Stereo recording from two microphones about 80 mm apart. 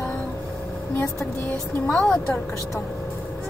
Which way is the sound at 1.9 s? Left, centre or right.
Centre.